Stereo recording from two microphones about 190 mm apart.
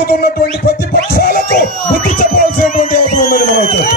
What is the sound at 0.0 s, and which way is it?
Music, 55° left (ahead or behind).